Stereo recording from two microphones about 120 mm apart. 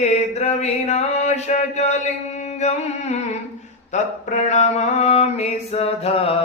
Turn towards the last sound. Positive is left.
turn(degrees=55)  # may be behind; listen again after turning